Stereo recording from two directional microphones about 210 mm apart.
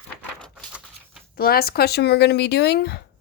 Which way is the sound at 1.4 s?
45° left (ahead or behind).